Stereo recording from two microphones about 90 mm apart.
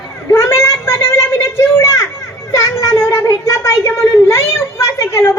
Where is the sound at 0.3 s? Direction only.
35° left (ahead or behind).